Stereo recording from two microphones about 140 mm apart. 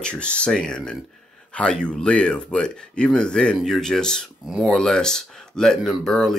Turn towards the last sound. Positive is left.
turn(degrees=0)  # may be behind; listen again after turning